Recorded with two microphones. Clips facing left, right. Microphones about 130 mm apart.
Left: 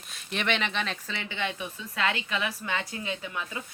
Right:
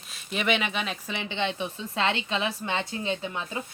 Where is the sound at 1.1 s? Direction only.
20° right (ahead or behind).